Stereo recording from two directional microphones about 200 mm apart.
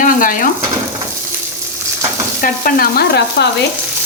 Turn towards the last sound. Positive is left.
turn(degrees=55)  # may be behind; listen again after turning